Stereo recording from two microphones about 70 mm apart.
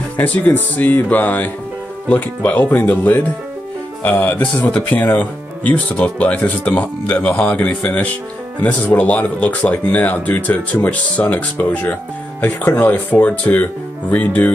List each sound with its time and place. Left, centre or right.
0.2 s speech: left